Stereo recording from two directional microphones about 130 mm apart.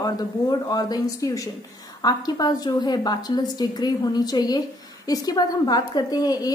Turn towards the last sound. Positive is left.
turn(degrees=30)  # may be behind; listen again after turning